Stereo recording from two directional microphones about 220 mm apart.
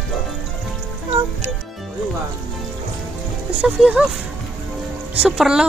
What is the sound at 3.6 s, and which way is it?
Speech, 5° right (ahead or behind).